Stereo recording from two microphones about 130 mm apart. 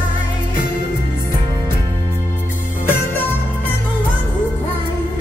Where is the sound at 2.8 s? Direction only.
15° left (ahead or behind).